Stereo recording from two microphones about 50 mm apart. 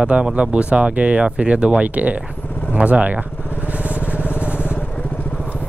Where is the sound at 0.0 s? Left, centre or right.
Right.